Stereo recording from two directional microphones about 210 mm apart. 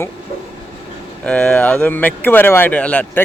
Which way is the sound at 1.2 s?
5° left (ahead or behind).